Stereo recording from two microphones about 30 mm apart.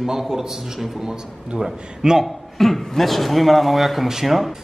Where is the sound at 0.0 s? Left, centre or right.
Centre.